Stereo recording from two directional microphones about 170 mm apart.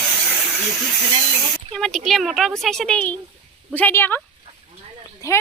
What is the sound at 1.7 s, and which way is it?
Speech, centre (ahead or behind).